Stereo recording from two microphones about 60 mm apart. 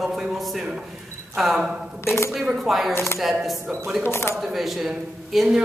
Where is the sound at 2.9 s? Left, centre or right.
Left.